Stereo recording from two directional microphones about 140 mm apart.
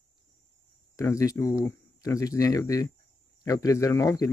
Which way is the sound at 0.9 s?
25° left (ahead or behind).